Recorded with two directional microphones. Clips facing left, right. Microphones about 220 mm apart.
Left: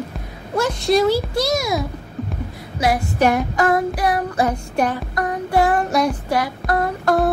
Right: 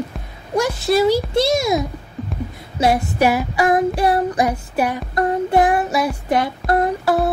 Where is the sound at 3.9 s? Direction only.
25° right (ahead or behind).